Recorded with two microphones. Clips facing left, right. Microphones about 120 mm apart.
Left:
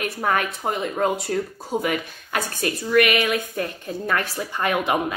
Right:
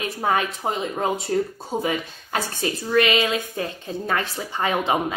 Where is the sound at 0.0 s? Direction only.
20° right (ahead or behind).